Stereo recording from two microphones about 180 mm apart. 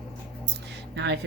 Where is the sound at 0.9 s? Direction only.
75° right (ahead or behind).